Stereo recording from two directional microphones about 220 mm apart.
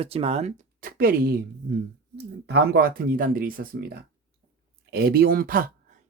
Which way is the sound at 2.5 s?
45° right (ahead or behind).